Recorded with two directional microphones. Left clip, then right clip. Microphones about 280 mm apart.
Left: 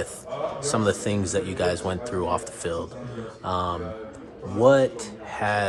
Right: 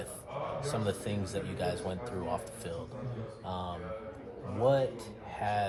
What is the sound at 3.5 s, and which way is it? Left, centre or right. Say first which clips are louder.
Speech: left 13 dB; left.